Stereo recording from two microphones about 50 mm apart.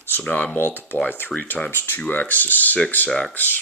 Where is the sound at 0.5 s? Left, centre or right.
Left.